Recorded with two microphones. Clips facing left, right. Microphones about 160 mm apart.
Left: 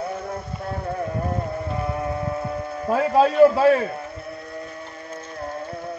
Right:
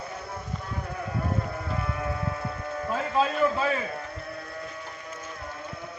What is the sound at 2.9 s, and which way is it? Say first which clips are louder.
Speech: left 8 dB; 60° left (ahead or behind).